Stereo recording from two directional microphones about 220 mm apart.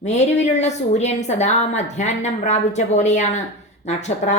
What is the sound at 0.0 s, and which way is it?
A woman's voice, 30° left (ahead or behind).